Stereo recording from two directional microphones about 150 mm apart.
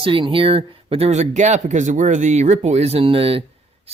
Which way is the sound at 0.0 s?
35° right (ahead or behind).